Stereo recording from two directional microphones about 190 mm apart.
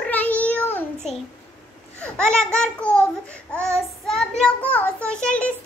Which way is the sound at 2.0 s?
5° left (ahead or behind).